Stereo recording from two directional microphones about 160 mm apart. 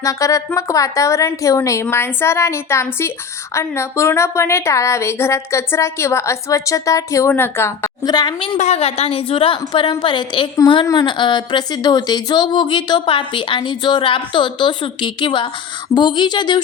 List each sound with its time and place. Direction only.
0.0 s a woman's voice: 20° left (ahead or behind)
8.0 s speech: 25° left (ahead or behind)
8.5 s a woman's voice: 45° left (ahead or behind); by 16.6 s 30° left (ahead or behind)